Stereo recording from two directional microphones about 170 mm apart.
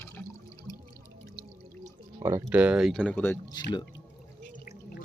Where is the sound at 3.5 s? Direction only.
25° left (ahead or behind).